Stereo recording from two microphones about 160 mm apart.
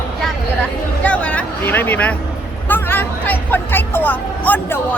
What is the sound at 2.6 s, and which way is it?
Speech, 10° left (ahead or behind).